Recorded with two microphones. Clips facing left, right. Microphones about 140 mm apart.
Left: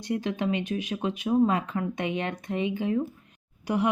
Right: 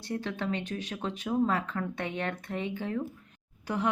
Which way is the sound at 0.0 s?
15° left (ahead or behind).